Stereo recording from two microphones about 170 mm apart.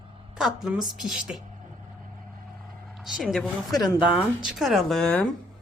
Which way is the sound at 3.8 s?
25° left (ahead or behind).